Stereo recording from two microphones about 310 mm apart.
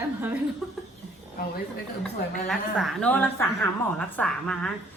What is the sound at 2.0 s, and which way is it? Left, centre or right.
A woman's voice, centre.